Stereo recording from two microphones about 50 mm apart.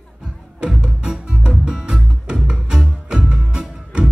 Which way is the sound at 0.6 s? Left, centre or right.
Centre.